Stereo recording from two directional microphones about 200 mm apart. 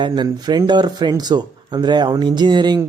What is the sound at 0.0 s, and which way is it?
Speech, 20° right (ahead or behind).